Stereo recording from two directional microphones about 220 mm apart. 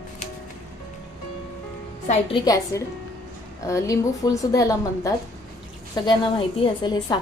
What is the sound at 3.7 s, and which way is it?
A woman's voice, 15° left (ahead or behind).